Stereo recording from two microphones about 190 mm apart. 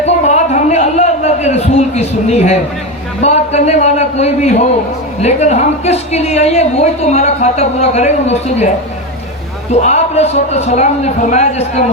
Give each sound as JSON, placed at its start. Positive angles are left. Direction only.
{"t": 0.0, "sound": "a sound", "side_deg": 40}
{"t": 3.2, "sound": "a woman's voice", "side_deg": 35}
{"t": 9.8, "sound": "a woman's voice", "side_deg": 35}